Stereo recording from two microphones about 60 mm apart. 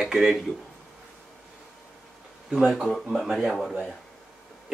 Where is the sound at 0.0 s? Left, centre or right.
Centre.